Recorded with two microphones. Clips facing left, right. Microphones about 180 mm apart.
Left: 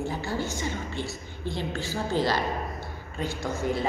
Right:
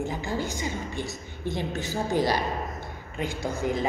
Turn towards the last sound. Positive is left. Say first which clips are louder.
# right 1 dB
turn(degrees=-15)  # may be behind; listen again after turning